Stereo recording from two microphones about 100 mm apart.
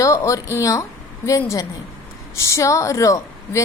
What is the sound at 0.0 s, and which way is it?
A woman's voice, 30° left (ahead or behind).